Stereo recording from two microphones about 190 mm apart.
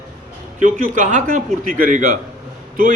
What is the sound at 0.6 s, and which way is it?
A man's voice, 40° right (ahead or behind).